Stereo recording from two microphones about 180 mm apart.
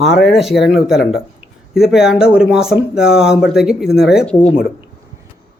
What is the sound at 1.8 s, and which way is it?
Speech, 5° right (ahead or behind).